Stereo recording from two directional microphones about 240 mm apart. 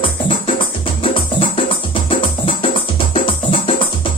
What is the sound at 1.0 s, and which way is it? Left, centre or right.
Music, left.